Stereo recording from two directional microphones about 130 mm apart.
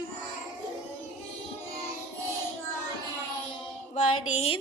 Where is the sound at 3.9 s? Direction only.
60° left (ahead or behind).